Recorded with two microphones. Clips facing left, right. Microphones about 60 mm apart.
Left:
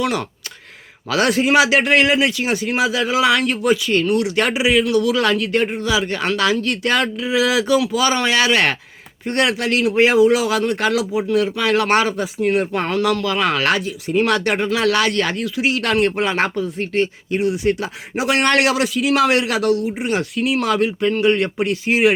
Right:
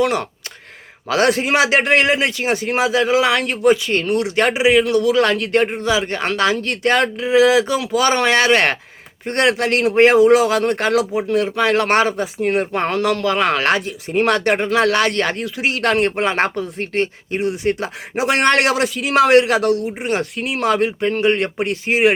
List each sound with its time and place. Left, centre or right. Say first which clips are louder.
0.0 s speech: right 3 dB; right